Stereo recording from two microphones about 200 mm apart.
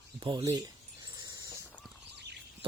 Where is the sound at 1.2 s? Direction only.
15° right (ahead or behind).